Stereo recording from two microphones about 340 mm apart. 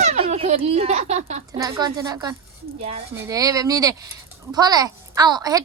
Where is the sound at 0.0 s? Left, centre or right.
Centre.